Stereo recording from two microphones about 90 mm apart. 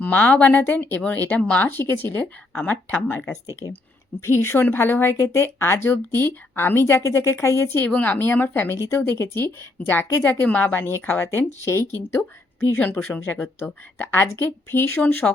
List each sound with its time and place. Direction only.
0.0 s speech: 15° left (ahead or behind)
4.4 s speech: 25° left (ahead or behind)
7.9 s speech: 15° left (ahead or behind)
10.4 s speech: 15° left (ahead or behind)
13.7 s speech: 20° left (ahead or behind)